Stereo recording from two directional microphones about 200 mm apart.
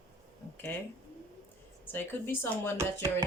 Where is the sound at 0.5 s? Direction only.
10° left (ahead or behind).